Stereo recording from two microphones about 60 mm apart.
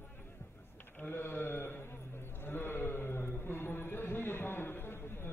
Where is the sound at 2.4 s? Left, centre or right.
Left.